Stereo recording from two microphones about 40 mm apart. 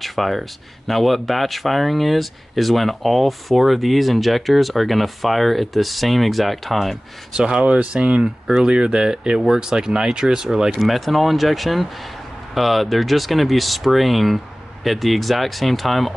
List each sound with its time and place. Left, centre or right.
0.0 s speech: centre
7.3 s speech: right
7.6 s speech: right
10.8 s speech: centre